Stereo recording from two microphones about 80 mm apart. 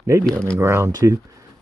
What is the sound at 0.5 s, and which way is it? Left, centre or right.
Speech, right.